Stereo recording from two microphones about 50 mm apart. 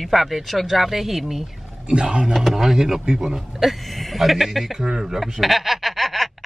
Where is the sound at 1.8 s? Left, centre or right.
Centre.